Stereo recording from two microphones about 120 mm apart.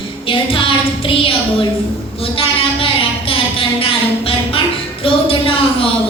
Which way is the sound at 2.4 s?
50° left (ahead or behind).